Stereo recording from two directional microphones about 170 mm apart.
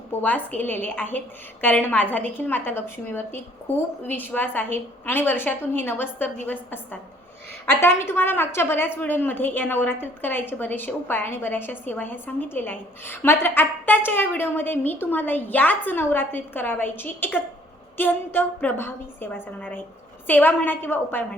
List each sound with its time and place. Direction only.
0.2 s a woman's voice: 10° left (ahead or behind)